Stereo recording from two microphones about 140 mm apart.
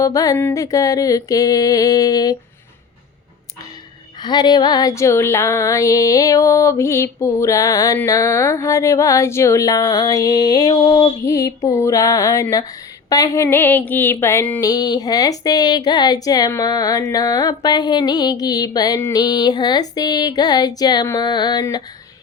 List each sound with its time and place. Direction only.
0.0 s speech: 25° left (ahead or behind)
4.2 s speech: 30° left (ahead or behind); by 14.6 s 15° left (ahead or behind)
14.6 s speech: 25° left (ahead or behind)